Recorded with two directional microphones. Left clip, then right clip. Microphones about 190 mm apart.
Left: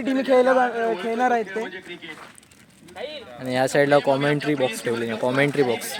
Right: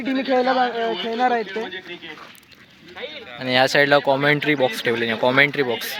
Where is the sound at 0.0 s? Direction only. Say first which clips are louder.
Left 2 dB; 20° left (ahead or behind).